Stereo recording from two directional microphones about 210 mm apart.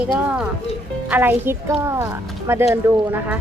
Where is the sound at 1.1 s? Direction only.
10° right (ahead or behind).